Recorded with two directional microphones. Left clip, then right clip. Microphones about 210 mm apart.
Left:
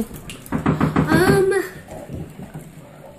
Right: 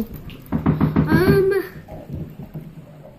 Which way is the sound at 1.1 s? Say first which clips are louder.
Even; centre (ahead or behind).